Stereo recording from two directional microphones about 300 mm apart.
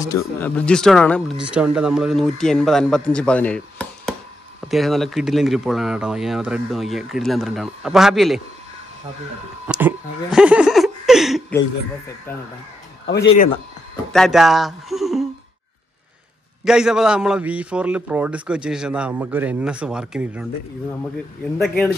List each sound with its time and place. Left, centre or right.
0.2 s speech: centre
9.7 s speech: centre
13.0 s speech: left
14.1 s speech: centre
16.6 s speech: centre
21.5 s speech: centre